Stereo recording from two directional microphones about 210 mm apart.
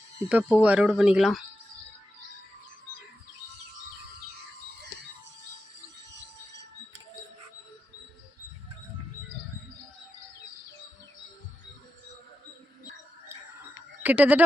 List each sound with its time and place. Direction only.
0.3 s speech: 5° right (ahead or behind)
6.1 s a sound: 55° right (ahead or behind)
14.0 s speech: 5° right (ahead or behind)